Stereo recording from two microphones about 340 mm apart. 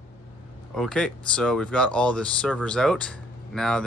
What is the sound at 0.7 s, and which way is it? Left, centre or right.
Speech, centre.